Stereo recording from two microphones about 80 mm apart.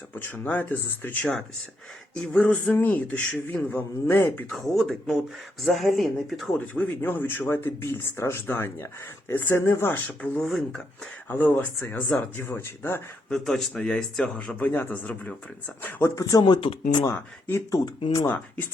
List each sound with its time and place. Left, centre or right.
0.1 s speech: left
1.2 s a man's voice: centre
4.4 s speech: centre
6.7 s speech: left
10.4 s speech: centre
11.3 s speech: left
12.4 s speech: left
13.3 s a man's voice: centre
14.6 s speech: left
16.0 s speech: left
16.4 s speech: left
17.2 s speech: left
17.7 s speech: left